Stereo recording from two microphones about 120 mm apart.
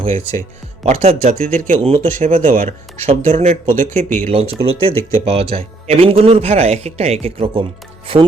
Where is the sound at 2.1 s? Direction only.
80° right.